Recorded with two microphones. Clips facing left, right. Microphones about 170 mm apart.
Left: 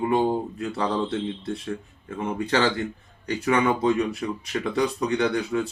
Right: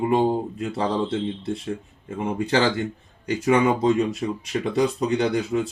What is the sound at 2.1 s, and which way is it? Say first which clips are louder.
Speech: right 2 dB; 25° right (ahead or behind).